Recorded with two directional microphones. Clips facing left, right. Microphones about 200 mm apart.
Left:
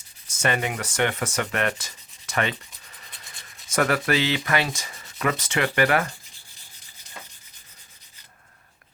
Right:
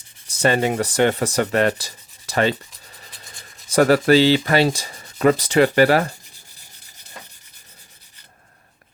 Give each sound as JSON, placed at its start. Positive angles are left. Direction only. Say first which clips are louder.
{"t": 0.3, "sound": "speech", "louder": "right 7 dB", "side_deg": -35}